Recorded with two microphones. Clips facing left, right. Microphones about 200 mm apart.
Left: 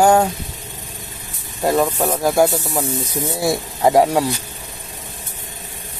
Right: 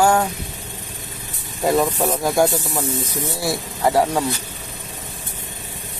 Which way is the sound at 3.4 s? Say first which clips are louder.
Left 5 dB; 20° left (ahead or behind).